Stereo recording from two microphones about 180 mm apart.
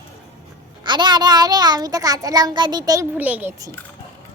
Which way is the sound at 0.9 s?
25° right (ahead or behind).